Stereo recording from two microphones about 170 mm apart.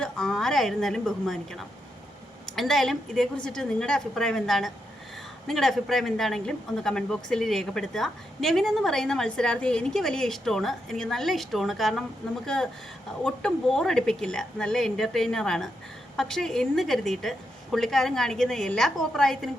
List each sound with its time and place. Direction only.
0.0 s a woman's voice: 5° left (ahead or behind)